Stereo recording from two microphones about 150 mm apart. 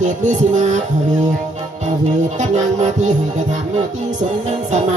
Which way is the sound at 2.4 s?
55° right (ahead or behind).